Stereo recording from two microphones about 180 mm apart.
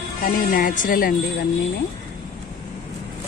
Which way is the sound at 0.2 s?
50° left (ahead or behind).